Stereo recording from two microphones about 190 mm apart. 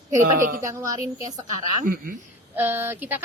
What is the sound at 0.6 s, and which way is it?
Speech, 15° right (ahead or behind).